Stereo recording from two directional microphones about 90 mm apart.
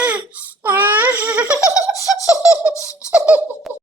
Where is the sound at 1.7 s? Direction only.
40° left (ahead or behind).